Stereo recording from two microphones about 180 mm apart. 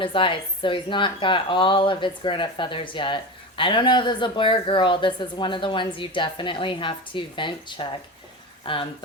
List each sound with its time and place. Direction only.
0.0 s speech: 30° left (ahead or behind)